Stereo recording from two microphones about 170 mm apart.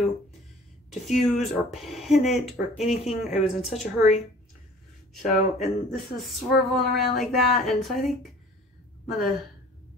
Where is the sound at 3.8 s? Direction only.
45° left (ahead or behind).